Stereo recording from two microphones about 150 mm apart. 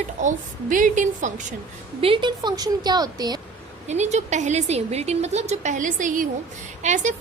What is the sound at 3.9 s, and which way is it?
A woman's voice, 50° right (ahead or behind).